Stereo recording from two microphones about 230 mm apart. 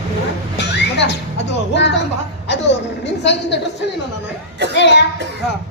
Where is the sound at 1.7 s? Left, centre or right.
Left.